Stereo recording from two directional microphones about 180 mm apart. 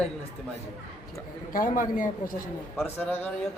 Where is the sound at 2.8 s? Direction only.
10° left (ahead or behind).